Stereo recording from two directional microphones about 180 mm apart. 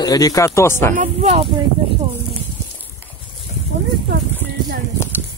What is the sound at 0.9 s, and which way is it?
Speech, 40° right (ahead or behind).